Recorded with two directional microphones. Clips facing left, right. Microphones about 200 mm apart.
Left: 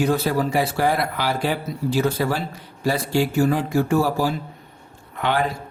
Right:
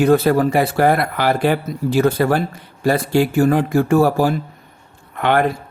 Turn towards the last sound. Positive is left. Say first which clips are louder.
# right 6 dB
turn(degrees=-60)  # may be behind; listen again after turning